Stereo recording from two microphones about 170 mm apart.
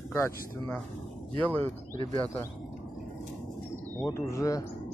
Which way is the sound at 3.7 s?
15° left (ahead or behind).